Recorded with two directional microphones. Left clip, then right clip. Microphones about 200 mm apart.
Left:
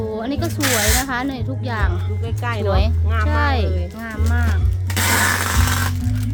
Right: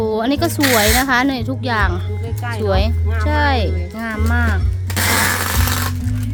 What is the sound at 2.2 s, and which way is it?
Speech, 35° left (ahead or behind).